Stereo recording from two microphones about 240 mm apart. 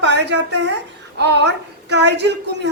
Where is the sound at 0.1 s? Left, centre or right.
Right.